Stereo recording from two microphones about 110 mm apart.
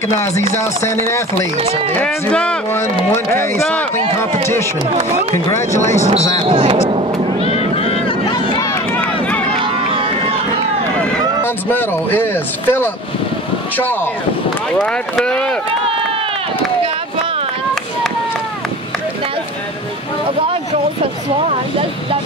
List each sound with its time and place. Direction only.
0.2 s speech: 25° left (ahead or behind)
2.0 s speech: 10° left (ahead or behind)
2.7 s speech: 20° left (ahead or behind)
6.4 s a sound: 55° right (ahead or behind)
7.7 s vehicle: 65° left (ahead or behind)
9.6 s run: 55° right (ahead or behind)
11.4 s speech: 20° left (ahead or behind)
14.8 s speech: 5° left (ahead or behind)